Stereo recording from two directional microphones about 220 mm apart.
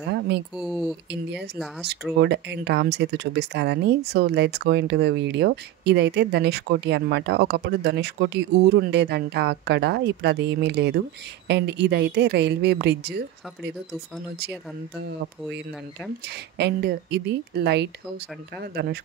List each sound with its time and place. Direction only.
0.6 s speech: centre (ahead or behind)
2.1 s speech: 50° right (ahead or behind)
16.3 s speech: 50° right (ahead or behind)